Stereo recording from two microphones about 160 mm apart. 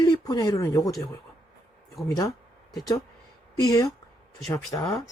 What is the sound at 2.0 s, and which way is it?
Speech, 20° left (ahead or behind).